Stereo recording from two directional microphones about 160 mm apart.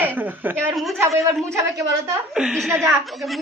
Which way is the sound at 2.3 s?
5° right (ahead or behind).